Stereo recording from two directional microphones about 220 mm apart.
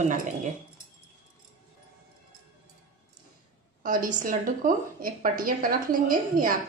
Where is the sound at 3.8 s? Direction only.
35° right (ahead or behind).